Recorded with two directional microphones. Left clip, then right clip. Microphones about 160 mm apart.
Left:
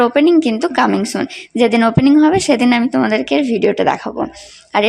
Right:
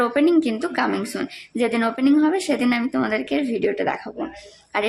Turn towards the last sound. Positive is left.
turn(degrees=35)  # may be behind; listen again after turning